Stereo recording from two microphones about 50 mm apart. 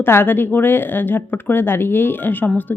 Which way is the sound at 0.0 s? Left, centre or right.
Left.